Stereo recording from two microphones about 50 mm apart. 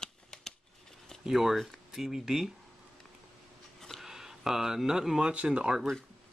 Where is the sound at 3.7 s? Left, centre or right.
Centre.